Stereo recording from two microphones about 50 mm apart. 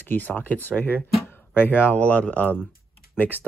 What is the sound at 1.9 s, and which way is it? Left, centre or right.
Speech, left.